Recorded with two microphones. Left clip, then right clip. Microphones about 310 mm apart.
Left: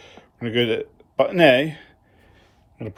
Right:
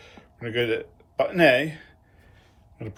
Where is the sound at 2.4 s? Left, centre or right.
Left.